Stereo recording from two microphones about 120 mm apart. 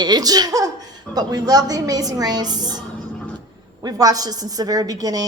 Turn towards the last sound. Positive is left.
turn(degrees=-30)  # may be behind; listen again after turning